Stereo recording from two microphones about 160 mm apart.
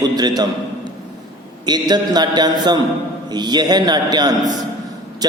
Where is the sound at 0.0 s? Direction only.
25° right (ahead or behind).